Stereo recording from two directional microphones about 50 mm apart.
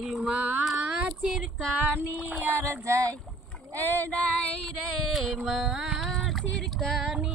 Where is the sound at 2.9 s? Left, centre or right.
Right.